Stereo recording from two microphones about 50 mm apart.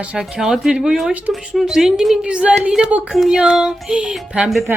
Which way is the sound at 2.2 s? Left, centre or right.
Right.